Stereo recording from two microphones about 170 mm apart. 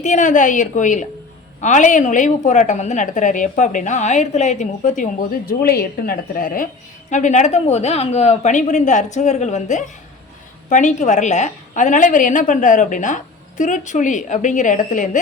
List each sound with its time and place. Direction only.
0.0 s a woman's voice: 45° left (ahead or behind)
5.5 s a woman's voice: 60° left (ahead or behind)